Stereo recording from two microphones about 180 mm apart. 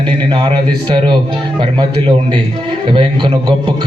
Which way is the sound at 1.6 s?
25° right (ahead or behind).